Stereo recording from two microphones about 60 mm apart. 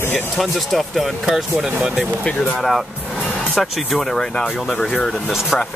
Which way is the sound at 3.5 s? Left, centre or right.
Centre.